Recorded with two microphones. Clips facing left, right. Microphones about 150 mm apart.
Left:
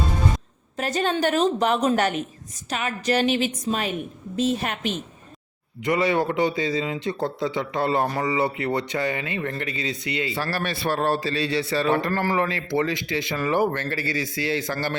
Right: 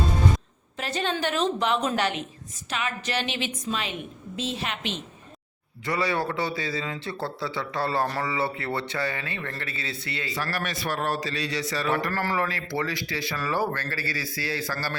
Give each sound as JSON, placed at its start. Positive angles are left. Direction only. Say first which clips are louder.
{"t": 0.8, "sound": "a woman's voice", "louder": "left 5 dB", "side_deg": 45}
{"t": 5.8, "sound": "a man's voice", "louder": "left 5 dB", "side_deg": 20}